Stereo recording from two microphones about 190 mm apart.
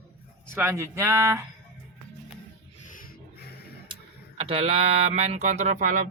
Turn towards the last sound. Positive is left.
turn(degrees=-40)  # may be behind; listen again after turning